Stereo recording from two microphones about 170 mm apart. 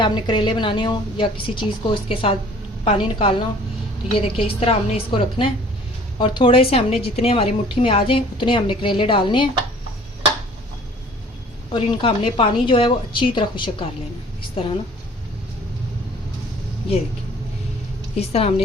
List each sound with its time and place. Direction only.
0.0 s a woman's voice: 25° left (ahead or behind)
11.7 s a woman's voice: 30° left (ahead or behind)
18.3 s a woman's voice: 35° left (ahead or behind)